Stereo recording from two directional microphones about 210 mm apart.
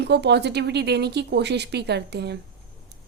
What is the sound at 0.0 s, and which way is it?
A woman's voice, 55° right (ahead or behind).